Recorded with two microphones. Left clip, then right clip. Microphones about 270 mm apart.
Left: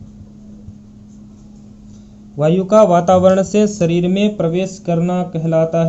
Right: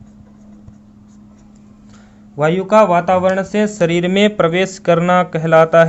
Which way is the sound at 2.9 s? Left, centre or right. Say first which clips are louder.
Left 2 dB; centre.